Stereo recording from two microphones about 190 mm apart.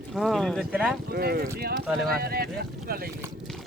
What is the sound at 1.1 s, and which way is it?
Speech, 50° right (ahead or behind).